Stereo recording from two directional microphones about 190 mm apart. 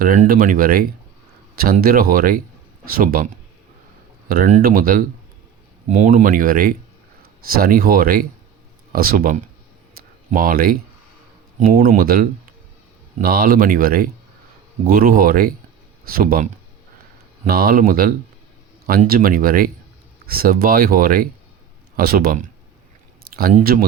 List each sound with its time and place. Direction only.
0.0 s speech: 45° right (ahead or behind)
10.0 s a sound: 50° right (ahead or behind)
11.6 s speech: 50° right (ahead or behind)